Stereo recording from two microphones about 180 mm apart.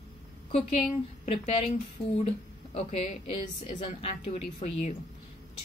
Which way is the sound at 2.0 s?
35° left (ahead or behind).